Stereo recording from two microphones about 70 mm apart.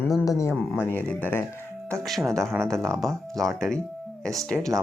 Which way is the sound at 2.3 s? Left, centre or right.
Centre.